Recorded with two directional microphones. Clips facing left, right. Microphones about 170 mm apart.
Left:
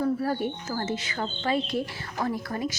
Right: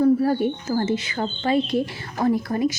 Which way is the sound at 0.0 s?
30° right (ahead or behind).